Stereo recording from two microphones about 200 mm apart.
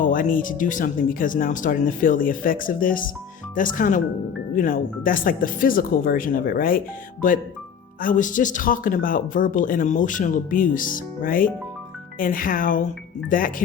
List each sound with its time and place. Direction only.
0.0 s speech: 40° left (ahead or behind)